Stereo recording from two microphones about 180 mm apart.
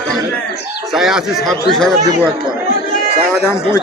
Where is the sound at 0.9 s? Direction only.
Centre (ahead or behind).